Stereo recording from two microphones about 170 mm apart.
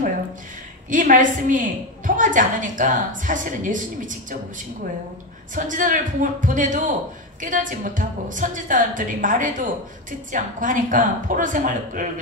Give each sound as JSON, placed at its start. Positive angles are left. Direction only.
{"t": 0.8, "sound": "a woman's voice", "side_deg": -50}
{"t": 5.5, "sound": "a woman's voice", "side_deg": -50}